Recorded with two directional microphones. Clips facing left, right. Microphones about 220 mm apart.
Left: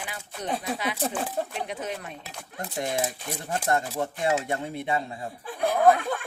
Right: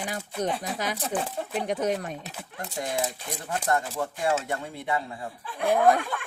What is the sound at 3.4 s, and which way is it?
Speech, 25° left (ahead or behind).